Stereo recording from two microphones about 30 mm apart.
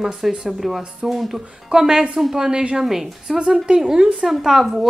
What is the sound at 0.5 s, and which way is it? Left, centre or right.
Speech, centre.